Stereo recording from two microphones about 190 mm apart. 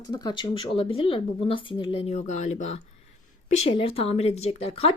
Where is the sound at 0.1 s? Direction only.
20° left (ahead or behind).